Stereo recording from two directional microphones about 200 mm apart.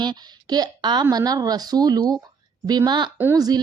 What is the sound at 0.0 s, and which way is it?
Speech, 20° right (ahead or behind).